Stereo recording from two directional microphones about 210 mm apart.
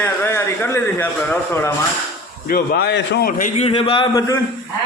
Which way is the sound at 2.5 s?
50° left (ahead or behind).